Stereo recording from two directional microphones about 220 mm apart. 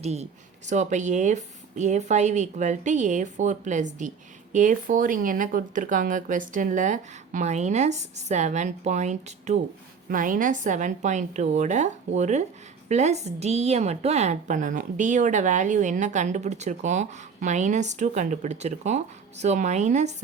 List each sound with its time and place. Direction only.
0.0 s a woman's voice: 30° right (ahead or behind)